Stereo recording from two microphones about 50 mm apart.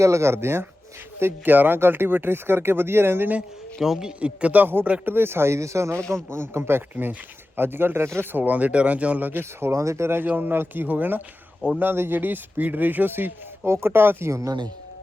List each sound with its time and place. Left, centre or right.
0.0 s speech: right
1.2 s speech: right
3.8 s speech: centre
4.2 s speech: right
4.6 s speech: right
5.5 s speech: right
6.3 s speech: right
6.9 s speech: right
9.4 s speech: right
9.7 s speech: right
10.2 s speech: right
13.7 s speech: right